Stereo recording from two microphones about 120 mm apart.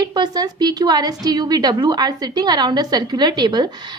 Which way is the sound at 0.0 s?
35° right (ahead or behind).